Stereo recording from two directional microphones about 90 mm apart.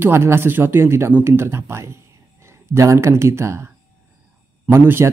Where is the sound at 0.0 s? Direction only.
25° right (ahead or behind).